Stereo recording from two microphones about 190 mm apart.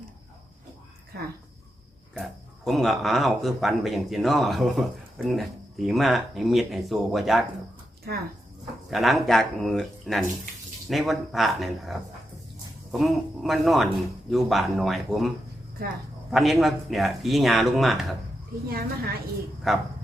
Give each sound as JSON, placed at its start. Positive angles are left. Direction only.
{"t": 2.1, "sound": "speech", "side_deg": 0}
{"t": 8.1, "sound": "speech", "side_deg": -55}
{"t": 8.9, "sound": "speech", "side_deg": 0}
{"t": 16.3, "sound": "speech", "side_deg": 0}
{"t": 18.7, "sound": "a woman's voice", "side_deg": -55}
{"t": 19.7, "sound": "speech", "side_deg": 0}